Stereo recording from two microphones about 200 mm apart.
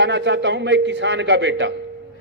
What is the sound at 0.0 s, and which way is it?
A man's voice, 60° right (ahead or behind).